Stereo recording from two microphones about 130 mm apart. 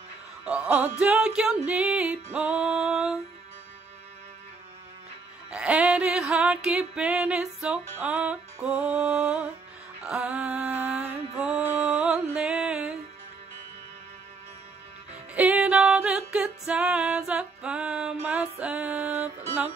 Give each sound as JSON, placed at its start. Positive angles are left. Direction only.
{"t": 0.5, "sound": "music", "side_deg": -10}
{"t": 5.5, "sound": "music", "side_deg": -10}
{"t": 15.3, "sound": "music", "side_deg": -10}